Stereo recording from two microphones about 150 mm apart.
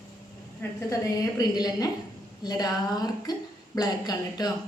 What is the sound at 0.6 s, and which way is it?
A woman's voice, 20° left (ahead or behind).